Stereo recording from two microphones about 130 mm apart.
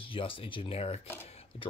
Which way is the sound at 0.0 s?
45° left (ahead or behind).